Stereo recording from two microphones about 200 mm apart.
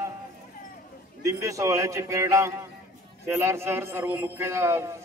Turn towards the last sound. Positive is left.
turn(degrees=-15)  # may be behind; listen again after turning